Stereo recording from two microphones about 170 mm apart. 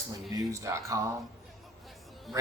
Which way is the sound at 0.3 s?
20° right (ahead or behind).